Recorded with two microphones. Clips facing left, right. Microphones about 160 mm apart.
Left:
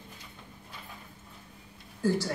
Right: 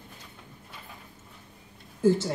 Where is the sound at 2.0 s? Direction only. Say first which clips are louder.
Right 5 dB; 20° right (ahead or behind).